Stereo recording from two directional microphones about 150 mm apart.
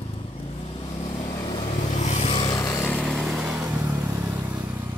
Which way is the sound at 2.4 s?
20° left (ahead or behind).